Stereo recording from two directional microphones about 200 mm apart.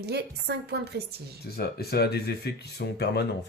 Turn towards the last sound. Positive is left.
turn(degrees=55)  # may be behind; listen again after turning